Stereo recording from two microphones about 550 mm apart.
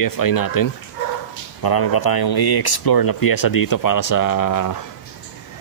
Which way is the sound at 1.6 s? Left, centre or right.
Left.